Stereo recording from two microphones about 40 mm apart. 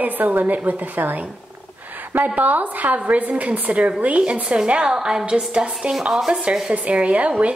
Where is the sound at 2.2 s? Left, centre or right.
Right; by 5.2 s centre.